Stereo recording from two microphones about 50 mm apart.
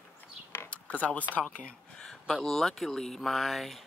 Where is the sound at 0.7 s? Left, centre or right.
Left.